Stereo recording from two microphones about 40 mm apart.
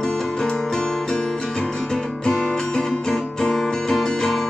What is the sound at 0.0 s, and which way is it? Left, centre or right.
Music, centre.